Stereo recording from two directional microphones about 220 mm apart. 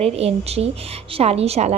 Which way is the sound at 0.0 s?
25° right (ahead or behind).